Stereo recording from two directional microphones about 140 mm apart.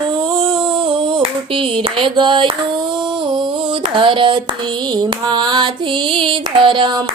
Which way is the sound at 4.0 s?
35° right (ahead or behind).